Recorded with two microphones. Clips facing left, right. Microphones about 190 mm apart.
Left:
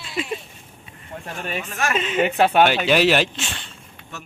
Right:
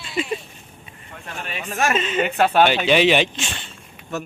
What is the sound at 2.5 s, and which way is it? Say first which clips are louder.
A man's voice: even; 5° left (ahead or behind).